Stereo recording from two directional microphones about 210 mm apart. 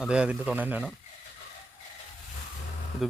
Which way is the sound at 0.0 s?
5° right (ahead or behind).